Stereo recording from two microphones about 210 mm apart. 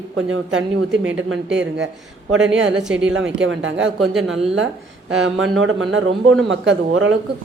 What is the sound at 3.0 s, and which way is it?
Speech, 60° right (ahead or behind).